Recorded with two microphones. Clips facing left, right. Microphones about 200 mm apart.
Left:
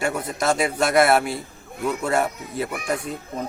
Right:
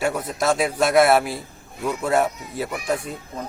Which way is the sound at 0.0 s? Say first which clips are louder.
Right 1 dB; centre (ahead or behind).